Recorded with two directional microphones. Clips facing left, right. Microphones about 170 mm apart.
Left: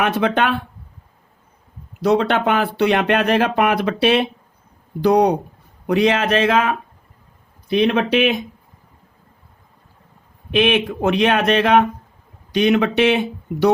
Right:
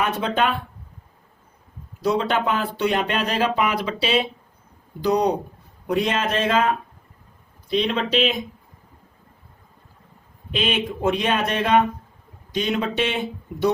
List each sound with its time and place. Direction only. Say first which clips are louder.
0.0 s speech: left 4 dB; 75° left (ahead or behind)
2.0 s speech: left 5 dB; 75° left (ahead or behind)
5.9 s speech: left 6 dB; 80° left
7.7 s speech: left 5 dB; 65° left (ahead or behind)
10.5 s speech: left 7 dB; 70° left (ahead or behind)